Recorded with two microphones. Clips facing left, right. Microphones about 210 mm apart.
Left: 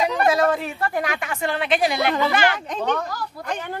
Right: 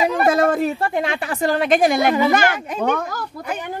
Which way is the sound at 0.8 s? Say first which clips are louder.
Right 3 dB; 25° right (ahead or behind).